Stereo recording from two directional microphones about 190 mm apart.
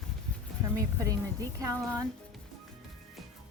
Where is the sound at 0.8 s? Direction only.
20° right (ahead or behind).